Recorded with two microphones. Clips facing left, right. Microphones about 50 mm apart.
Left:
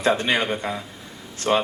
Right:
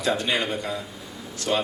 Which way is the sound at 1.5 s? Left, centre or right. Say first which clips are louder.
Left 4 dB; left.